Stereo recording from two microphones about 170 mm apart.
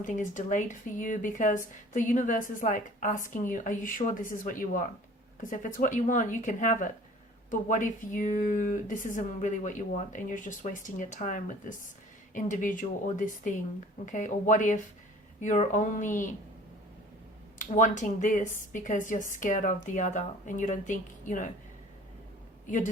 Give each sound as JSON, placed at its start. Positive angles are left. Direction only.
{"t": 0.0, "sound": "speech", "side_deg": 50}
{"t": 17.6, "sound": "speech", "side_deg": 50}